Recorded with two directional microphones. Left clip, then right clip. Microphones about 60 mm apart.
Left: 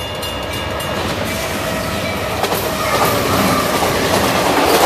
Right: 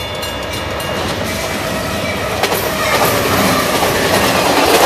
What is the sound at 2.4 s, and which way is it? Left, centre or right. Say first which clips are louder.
Train: right 3 dB; right.